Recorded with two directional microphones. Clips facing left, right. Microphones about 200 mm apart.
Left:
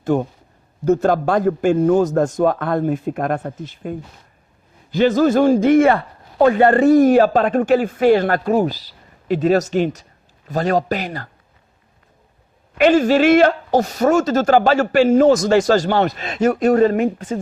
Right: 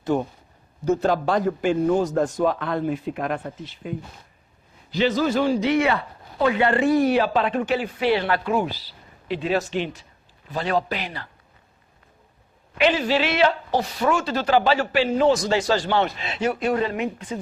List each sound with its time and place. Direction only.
0.0 s a man's voice: 50° left (ahead or behind)
12.7 s a man's voice: 45° left (ahead or behind)